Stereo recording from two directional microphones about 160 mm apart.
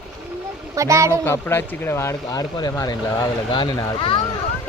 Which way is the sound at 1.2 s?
15° left (ahead or behind).